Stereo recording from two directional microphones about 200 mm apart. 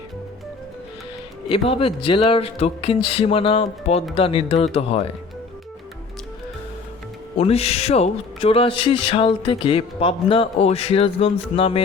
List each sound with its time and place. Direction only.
1.5 s speech: 25° left (ahead or behind)
7.3 s speech: 30° left (ahead or behind)